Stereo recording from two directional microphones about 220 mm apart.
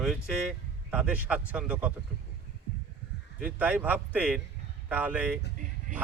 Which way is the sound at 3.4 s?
5° right (ahead or behind).